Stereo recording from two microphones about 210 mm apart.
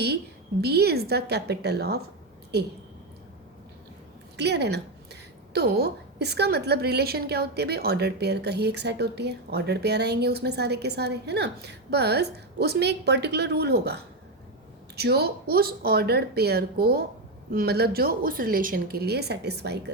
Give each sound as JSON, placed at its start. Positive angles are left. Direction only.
{"t": 0.6, "sound": "a woman's voice", "side_deg": -50}
{"t": 4.4, "sound": "a woman's voice", "side_deg": -55}